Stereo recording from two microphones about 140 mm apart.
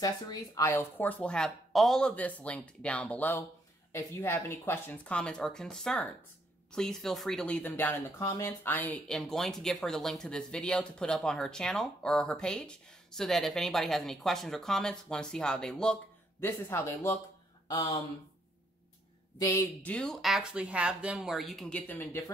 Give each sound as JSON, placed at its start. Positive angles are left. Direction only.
{"t": 0.0, "sound": "speech", "side_deg": 25}
{"t": 16.3, "sound": "speech", "side_deg": 15}
{"t": 19.3, "sound": "speech", "side_deg": 20}